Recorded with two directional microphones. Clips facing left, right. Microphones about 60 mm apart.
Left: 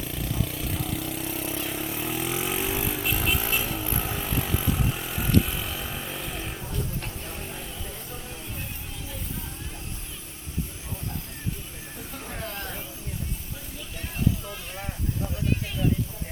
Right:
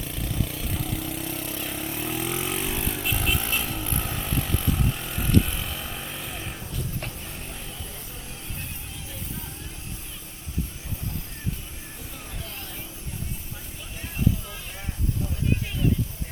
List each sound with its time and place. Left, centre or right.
0.0 s vehicle: centre
12.3 s vehicle: left
14.2 s a sound: centre